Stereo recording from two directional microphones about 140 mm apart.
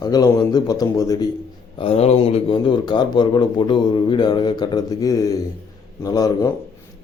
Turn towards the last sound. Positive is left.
turn(degrees=25)  # may be behind; listen again after turning